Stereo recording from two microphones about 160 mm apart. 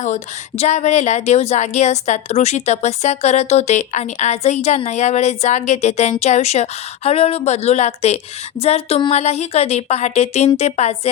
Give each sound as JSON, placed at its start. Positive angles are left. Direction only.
{"t": 0.0, "sound": "a woman's voice", "side_deg": 45}